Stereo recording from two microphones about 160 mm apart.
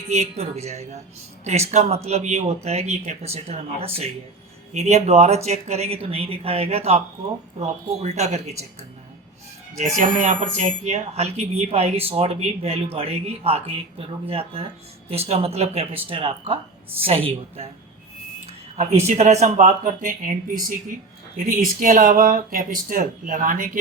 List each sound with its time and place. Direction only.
0.1 s speech: 45° right (ahead or behind)
9.7 s speech: 45° right (ahead or behind)
19.0 s speech: 45° right (ahead or behind)